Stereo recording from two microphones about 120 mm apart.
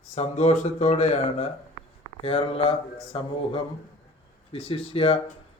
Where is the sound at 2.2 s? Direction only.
50° left (ahead or behind).